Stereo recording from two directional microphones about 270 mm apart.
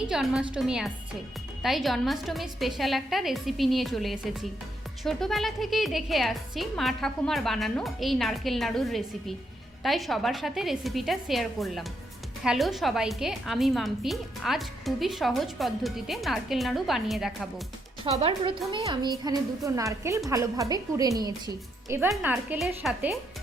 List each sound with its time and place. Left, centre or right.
0.1 s a woman's voice: centre
18.0 s a woman's voice: right; by 23.1 s centre